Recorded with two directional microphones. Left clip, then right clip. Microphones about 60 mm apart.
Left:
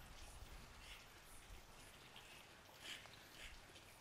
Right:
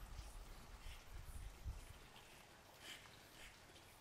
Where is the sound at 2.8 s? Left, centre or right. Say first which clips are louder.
Left 3 dB; centre.